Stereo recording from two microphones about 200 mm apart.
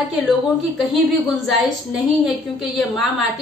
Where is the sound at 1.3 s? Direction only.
Centre (ahead or behind).